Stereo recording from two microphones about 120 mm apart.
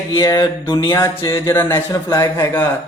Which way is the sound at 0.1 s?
35° left (ahead or behind).